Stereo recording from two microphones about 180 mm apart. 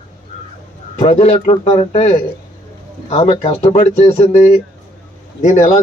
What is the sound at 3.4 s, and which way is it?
Speech, 40° left (ahead or behind).